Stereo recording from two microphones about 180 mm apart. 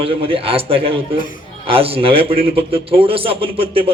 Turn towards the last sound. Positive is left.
turn(degrees=-30)  # may be behind; listen again after turning